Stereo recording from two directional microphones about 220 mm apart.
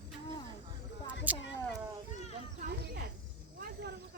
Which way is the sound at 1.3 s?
5° right (ahead or behind).